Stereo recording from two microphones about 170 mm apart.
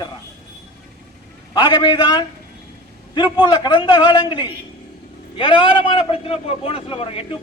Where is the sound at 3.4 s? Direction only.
25° left (ahead or behind).